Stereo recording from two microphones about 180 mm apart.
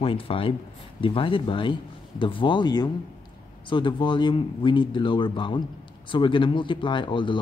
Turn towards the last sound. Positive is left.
turn(degrees=25)  # may be behind; listen again after turning